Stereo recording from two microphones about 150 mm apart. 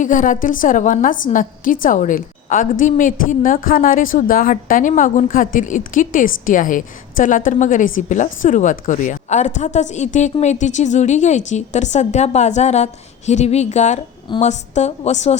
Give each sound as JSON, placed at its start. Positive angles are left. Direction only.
{"t": 0.0, "sound": "a woman's voice", "side_deg": 60}